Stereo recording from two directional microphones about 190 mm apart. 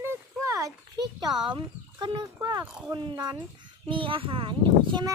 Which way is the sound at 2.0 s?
25° right (ahead or behind).